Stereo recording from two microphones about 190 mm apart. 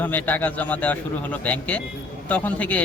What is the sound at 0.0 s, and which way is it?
A man's voice, 10° left (ahead or behind).